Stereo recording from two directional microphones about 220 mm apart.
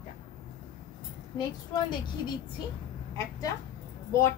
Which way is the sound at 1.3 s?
20° left (ahead or behind).